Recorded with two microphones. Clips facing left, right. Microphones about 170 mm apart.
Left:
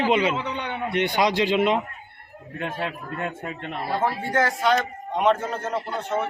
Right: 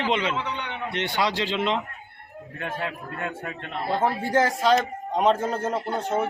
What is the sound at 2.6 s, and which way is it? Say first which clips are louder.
A man's voice: left 2 dB; 25° left (ahead or behind).